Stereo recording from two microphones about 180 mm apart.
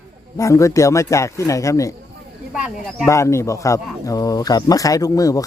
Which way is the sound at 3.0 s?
15° left (ahead or behind).